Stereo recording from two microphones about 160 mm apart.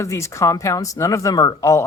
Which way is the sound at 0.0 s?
20° left (ahead or behind).